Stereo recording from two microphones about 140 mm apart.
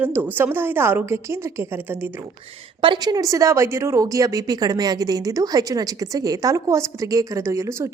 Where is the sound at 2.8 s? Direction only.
30° right (ahead or behind).